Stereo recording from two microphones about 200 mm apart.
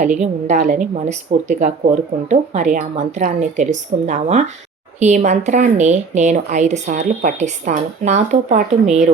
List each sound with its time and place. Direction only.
0.0 s a woman's voice: 35° right (ahead or behind)